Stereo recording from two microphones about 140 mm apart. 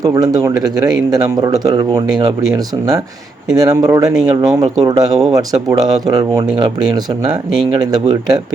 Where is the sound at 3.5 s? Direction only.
25° right (ahead or behind).